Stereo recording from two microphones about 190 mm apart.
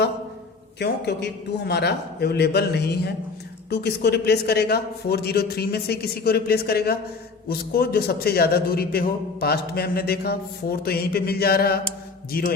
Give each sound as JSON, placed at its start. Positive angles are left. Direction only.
{"t": 0.8, "sound": "a man's voice", "side_deg": 60}